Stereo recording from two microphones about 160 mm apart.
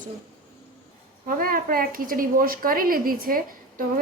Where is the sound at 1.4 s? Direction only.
65° right (ahead or behind).